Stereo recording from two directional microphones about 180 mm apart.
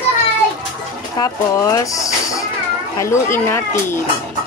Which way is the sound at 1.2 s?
20° left (ahead or behind).